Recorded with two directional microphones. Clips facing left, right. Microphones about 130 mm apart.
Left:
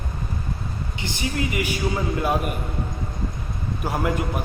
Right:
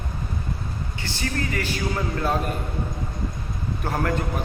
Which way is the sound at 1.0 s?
15° left (ahead or behind).